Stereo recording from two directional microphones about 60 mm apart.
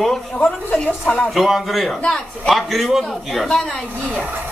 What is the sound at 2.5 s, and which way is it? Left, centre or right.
A man's voice, centre.